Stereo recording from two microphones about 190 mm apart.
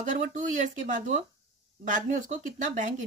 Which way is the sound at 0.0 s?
40° right (ahead or behind).